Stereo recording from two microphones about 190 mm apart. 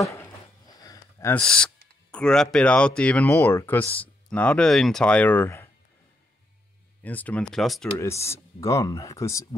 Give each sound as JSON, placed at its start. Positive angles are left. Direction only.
{"t": 0.0, "sound": "a sound", "side_deg": 15}
{"t": 0.8, "sound": "speech", "side_deg": 10}
{"t": 7.0, "sound": "speech", "side_deg": 10}
{"t": 8.0, "sound": "speech", "side_deg": 15}